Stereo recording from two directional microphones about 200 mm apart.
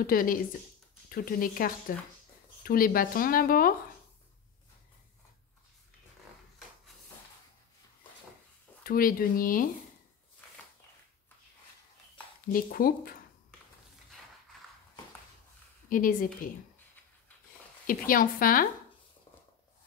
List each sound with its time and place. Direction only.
0.0 s speech: 45° left (ahead or behind)
8.8 s speech: 45° left (ahead or behind)
12.5 s speech: 45° left (ahead or behind)
15.9 s speech: 45° left (ahead or behind)
17.8 s speech: 45° left (ahead or behind)